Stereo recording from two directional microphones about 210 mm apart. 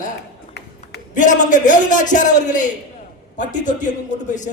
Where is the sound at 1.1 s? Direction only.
35° left (ahead or behind).